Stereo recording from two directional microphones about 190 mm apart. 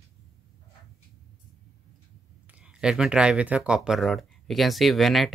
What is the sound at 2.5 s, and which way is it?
Speech, 5° right (ahead or behind).